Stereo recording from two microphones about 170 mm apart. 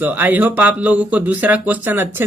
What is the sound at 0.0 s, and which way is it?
Speech, 10° right (ahead or behind).